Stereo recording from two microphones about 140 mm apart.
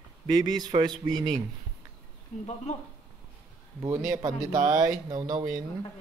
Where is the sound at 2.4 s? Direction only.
50° left (ahead or behind).